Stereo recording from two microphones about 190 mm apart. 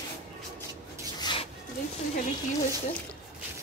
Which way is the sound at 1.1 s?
25° left (ahead or behind).